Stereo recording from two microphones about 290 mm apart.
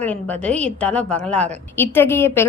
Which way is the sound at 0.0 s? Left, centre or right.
Centre.